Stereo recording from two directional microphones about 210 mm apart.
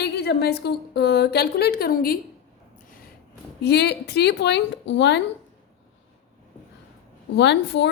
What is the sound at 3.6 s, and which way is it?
A woman's voice, 55° left (ahead or behind).